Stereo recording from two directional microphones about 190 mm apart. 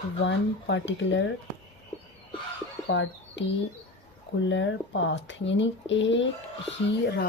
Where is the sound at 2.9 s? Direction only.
75° left (ahead or behind).